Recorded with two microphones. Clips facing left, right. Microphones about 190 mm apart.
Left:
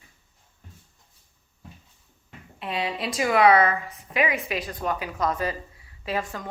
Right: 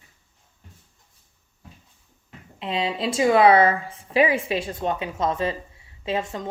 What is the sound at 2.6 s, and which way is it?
Speech, 25° right (ahead or behind).